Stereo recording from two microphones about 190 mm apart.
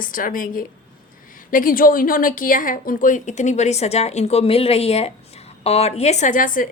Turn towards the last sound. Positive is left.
turn(degrees=45)  # may be behind; listen again after turning